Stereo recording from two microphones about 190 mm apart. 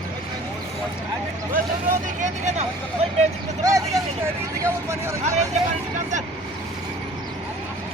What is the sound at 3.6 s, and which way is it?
Speech, 15° right (ahead or behind).